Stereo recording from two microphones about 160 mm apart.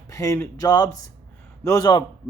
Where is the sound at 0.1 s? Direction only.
20° left (ahead or behind).